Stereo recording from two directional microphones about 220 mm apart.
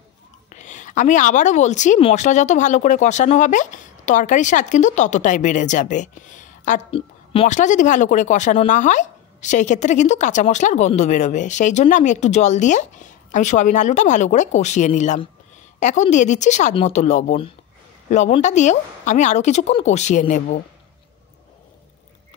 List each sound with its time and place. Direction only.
0.5 s a woman's voice: 35° left (ahead or behind)